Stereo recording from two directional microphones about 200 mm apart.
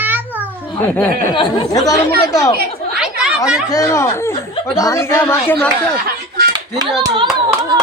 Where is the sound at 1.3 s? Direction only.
20° left (ahead or behind).